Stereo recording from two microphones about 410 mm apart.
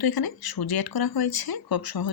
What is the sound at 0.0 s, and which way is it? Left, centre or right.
Speech, left.